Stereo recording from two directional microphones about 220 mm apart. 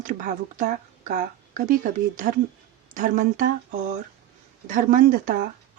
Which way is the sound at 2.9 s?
35° right (ahead or behind).